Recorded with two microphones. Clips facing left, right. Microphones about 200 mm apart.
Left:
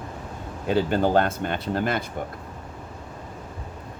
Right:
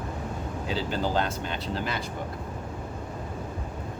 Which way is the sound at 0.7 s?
55° left (ahead or behind).